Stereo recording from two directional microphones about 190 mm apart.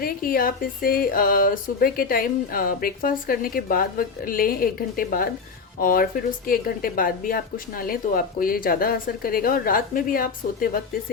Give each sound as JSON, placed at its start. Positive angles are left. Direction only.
{"t": 0.0, "sound": "speech", "side_deg": 50}